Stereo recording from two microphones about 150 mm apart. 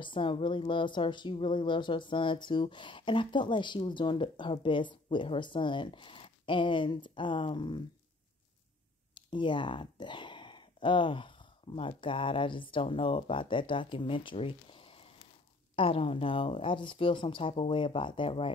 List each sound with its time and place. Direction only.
0.0 s a woman's voice: 35° left (ahead or behind)
9.1 s a woman's voice: 30° left (ahead or behind)